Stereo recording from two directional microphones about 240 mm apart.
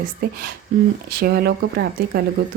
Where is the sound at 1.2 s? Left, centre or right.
Right.